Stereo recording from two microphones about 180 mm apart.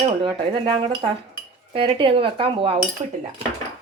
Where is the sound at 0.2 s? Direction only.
25° right (ahead or behind).